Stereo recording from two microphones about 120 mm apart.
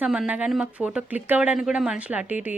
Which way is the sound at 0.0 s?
10° right (ahead or behind).